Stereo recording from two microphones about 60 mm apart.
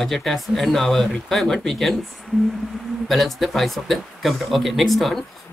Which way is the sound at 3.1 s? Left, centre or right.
Centre.